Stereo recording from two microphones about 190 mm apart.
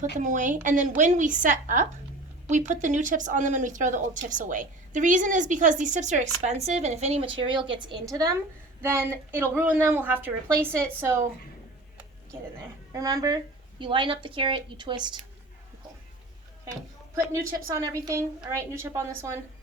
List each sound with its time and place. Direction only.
0.2 s a woman's voice: 40° right (ahead or behind); by 11.1 s 10° right (ahead or behind)
12.9 s a woman's voice: 20° right (ahead or behind)
17.7 s a woman's voice: 20° right (ahead or behind)